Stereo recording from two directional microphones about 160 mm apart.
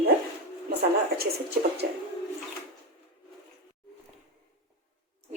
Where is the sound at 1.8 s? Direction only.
75° right (ahead or behind).